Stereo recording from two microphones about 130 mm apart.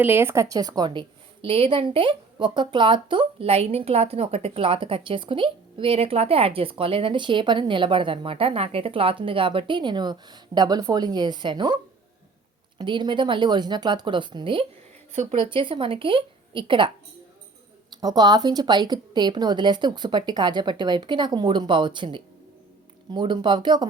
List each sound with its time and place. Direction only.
0.0 s a woman's voice: 15° right (ahead or behind); by 11.8 s 35° right (ahead or behind)
12.8 s a woman's voice: 35° right (ahead or behind)
15.1 s speech: 55° right (ahead or behind)
15.4 s a woman's voice: 40° right (ahead or behind)
18.0 s a woman's voice: 30° right (ahead or behind)